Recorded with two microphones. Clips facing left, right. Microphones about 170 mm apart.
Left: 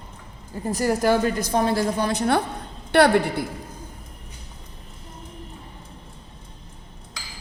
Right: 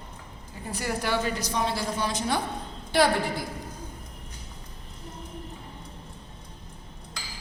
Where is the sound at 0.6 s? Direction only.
40° left (ahead or behind); by 3.4 s 65° left (ahead or behind).